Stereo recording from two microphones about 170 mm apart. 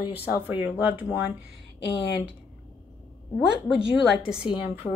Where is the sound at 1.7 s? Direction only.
90° left.